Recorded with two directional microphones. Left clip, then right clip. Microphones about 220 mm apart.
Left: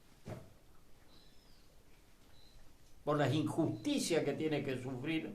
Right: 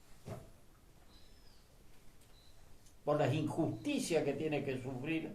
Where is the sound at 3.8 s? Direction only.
45° left (ahead or behind).